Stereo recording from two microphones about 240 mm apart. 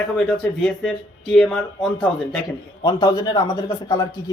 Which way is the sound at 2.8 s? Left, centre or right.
Centre.